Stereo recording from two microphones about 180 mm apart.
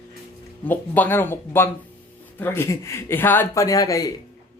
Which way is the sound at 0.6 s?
10° left (ahead or behind).